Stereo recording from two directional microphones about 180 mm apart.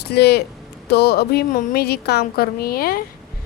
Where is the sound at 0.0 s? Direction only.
65° left (ahead or behind).